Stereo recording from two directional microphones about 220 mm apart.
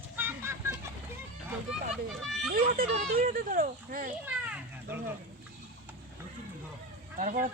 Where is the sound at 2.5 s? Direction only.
40° right (ahead or behind).